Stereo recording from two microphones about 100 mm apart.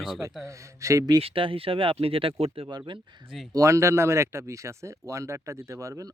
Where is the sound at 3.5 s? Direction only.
30° right (ahead or behind).